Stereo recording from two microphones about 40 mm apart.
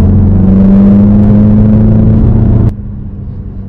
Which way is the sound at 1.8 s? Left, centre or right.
Centre.